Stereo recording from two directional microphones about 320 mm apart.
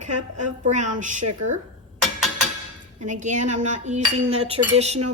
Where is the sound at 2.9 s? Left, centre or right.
Right.